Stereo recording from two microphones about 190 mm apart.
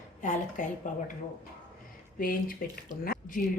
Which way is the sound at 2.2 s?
50° left (ahead or behind).